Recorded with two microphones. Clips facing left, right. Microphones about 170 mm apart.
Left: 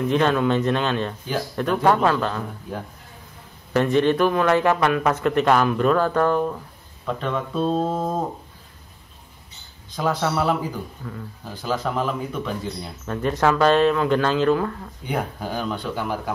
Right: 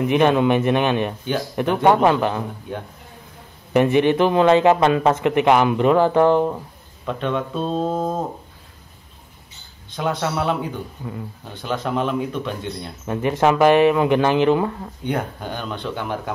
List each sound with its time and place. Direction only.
0.0 s speech: 15° right (ahead or behind)
2.7 s a man's voice: centre (ahead or behind)
3.7 s speech: 15° right (ahead or behind)
7.1 s a man's voice: centre (ahead or behind)
9.9 s a man's voice: centre (ahead or behind)
13.0 s speech: 15° right (ahead or behind)
15.0 s a man's voice: 5° left (ahead or behind)